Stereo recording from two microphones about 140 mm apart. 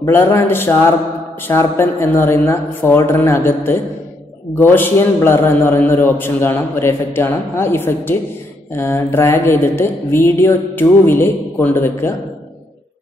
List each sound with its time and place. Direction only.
0.0 s a man's voice: 15° left (ahead or behind)